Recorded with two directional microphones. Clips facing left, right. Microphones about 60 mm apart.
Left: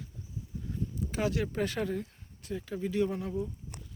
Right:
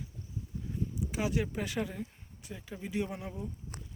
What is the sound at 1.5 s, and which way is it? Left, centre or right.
Speech, centre.